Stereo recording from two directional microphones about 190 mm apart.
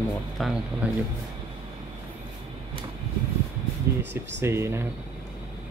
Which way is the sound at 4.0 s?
65° right (ahead or behind).